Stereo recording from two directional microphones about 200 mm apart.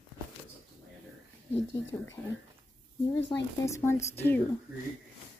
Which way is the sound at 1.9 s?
10° left (ahead or behind).